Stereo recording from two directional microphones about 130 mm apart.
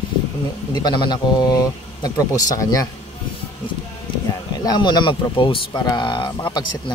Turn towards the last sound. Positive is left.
turn(degrees=40)  # may be behind; listen again after turning